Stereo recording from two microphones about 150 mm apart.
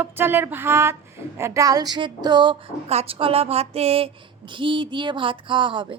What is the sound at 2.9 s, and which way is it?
Speech, 40° right (ahead or behind).